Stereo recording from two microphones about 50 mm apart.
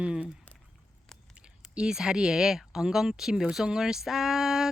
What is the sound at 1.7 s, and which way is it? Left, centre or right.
Speech, centre.